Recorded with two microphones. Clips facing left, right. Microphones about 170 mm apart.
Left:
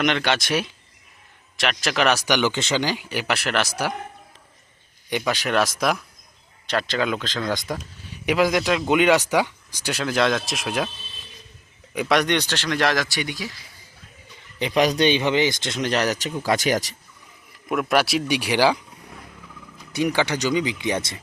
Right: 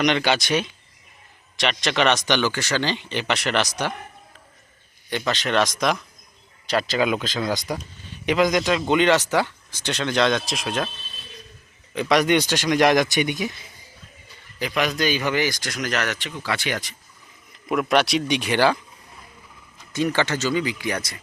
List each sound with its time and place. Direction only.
0.0 s speech: centre (ahead or behind); by 2.8 s 20° left (ahead or behind)
2.8 s speech: 10° left (ahead or behind)
5.0 s speech: 10° left (ahead or behind); by 7.8 s 5° right (ahead or behind)
8.0 s speech: 10° left (ahead or behind)
11.9 s speech: centre (ahead or behind); by 13.7 s 20° right (ahead or behind)
14.6 s speech: 30° left (ahead or behind)
17.7 s speech: centre (ahead or behind)
19.9 s speech: 15° left (ahead or behind)